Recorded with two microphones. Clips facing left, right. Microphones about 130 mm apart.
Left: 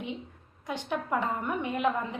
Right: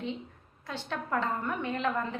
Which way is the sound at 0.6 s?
15° left (ahead or behind).